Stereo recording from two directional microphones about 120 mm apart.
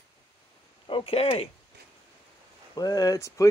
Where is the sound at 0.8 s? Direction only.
50° left (ahead or behind).